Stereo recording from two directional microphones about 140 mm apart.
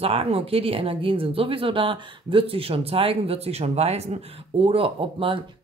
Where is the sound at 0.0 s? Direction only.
45° right (ahead or behind).